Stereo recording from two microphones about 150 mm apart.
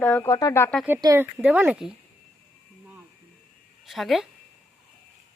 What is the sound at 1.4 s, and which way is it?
Speech, 10° right (ahead or behind).